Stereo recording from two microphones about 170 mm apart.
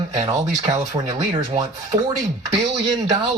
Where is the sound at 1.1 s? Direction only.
25° right (ahead or behind).